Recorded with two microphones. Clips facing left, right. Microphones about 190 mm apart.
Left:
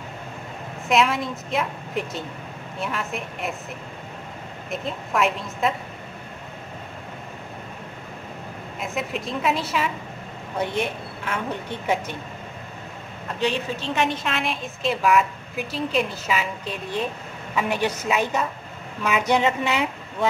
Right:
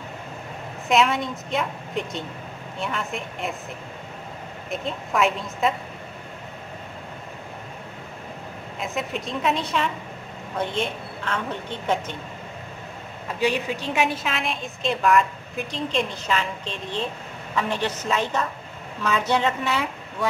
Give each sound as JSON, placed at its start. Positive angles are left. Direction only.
{"t": 0.8, "sound": "a woman's voice", "side_deg": 0}
{"t": 4.6, "sound": "a woman's voice", "side_deg": 0}
{"t": 8.7, "sound": "a woman's voice", "side_deg": 0}
{"t": 13.4, "sound": "a woman's voice", "side_deg": -10}